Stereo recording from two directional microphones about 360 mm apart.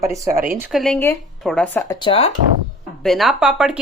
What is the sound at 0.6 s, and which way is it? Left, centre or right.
Speech, centre.